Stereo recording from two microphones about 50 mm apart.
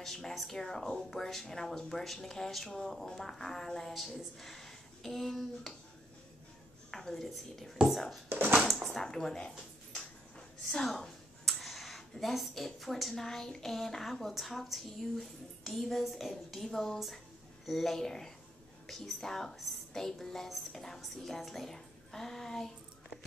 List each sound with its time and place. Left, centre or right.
0.0 s speech: centre
6.9 s a woman's voice: centre
7.7 s speech: centre
8.3 s speech: right
9.0 s speech: centre
10.6 s speech: centre